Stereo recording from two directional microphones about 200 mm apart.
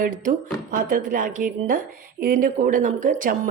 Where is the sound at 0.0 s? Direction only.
45° right (ahead or behind).